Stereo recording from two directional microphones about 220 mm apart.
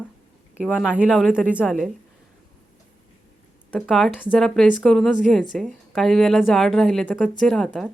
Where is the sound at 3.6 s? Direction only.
5° left (ahead or behind).